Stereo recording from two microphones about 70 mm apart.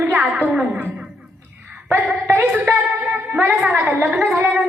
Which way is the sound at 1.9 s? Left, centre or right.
Right.